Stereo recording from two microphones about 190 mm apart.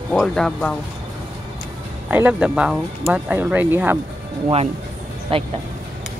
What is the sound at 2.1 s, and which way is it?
Speech, 10° right (ahead or behind).